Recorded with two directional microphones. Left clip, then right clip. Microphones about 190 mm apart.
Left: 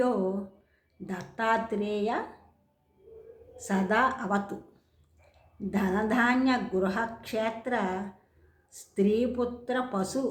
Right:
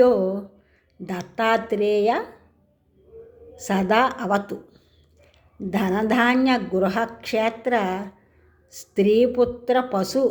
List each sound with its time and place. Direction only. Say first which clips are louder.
1.0 s a woman's voice: right 7 dB; 30° right (ahead or behind)
3.5 s a woman's voice: right 7 dB; 30° right (ahead or behind)
5.5 s a woman's voice: right 6 dB; 30° right (ahead or behind)